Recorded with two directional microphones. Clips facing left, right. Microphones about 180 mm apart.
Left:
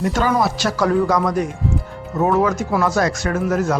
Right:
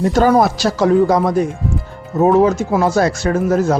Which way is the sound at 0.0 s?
40° right (ahead or behind).